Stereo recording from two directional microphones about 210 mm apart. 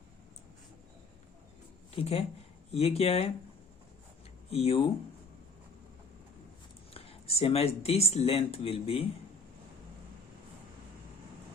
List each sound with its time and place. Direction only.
2.0 s speech: 30° left (ahead or behind)
4.4 s speech: 30° left (ahead or behind)
6.9 s speech: 30° left (ahead or behind)